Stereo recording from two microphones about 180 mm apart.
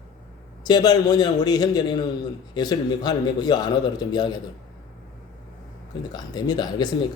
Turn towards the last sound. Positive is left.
turn(degrees=25)  # may be behind; listen again after turning